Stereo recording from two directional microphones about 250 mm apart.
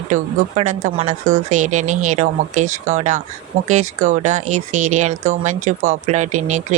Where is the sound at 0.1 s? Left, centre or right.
Right.